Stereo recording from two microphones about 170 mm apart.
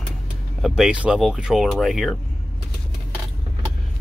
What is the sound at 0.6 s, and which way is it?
Speech, centre (ahead or behind).